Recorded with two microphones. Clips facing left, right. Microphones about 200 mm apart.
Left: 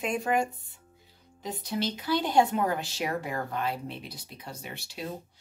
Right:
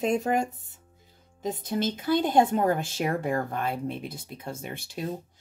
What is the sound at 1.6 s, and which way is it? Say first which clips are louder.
Speech: right 1 dB; 50° right (ahead or behind).